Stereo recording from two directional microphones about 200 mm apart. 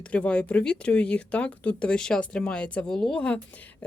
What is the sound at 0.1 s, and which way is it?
Speech, 5° left (ahead or behind).